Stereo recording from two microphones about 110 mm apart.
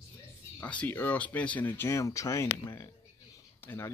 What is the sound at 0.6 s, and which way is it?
Speech, 15° left (ahead or behind).